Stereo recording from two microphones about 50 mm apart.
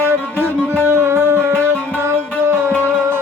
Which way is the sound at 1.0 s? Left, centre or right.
Right.